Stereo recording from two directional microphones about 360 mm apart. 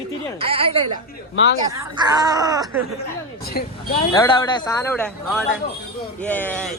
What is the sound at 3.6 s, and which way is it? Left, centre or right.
Speech, left.